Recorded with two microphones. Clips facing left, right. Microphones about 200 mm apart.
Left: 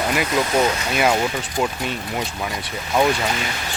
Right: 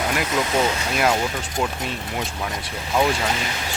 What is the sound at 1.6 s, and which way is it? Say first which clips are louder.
Speech: left 2 dB; 5° left (ahead or behind).